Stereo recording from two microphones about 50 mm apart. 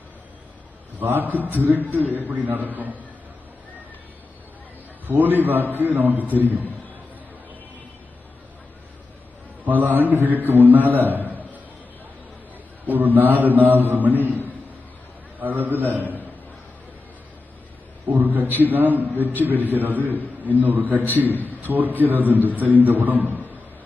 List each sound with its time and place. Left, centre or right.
0.9 s a man's voice: right
5.0 s a man's voice: right
9.6 s a man's voice: right
11.3 s a sound: right
12.8 s a man's voice: right
15.4 s a man's voice: right
18.1 s a man's voice: right